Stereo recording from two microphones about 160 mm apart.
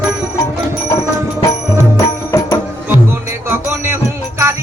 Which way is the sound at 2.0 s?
15° left (ahead or behind).